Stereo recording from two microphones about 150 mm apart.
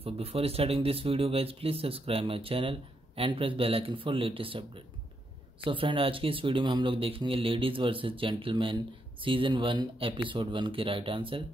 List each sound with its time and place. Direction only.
0.0 s speech: 40° right (ahead or behind)